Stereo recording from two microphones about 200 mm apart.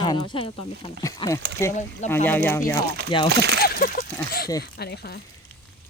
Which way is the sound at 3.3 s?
55° right (ahead or behind).